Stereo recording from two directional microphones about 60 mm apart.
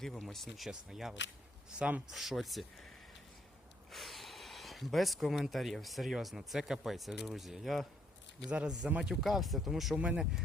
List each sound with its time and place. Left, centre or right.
0.0 s speech: centre
2.0 s speech: centre
3.9 s speech: centre
8.4 s speech: centre
9.2 s speech: centre
10.0 s speech: centre